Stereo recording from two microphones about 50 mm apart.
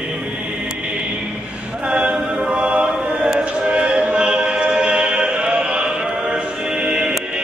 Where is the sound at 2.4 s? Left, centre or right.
Right.